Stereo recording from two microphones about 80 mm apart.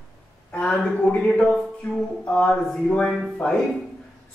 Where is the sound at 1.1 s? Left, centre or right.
Centre.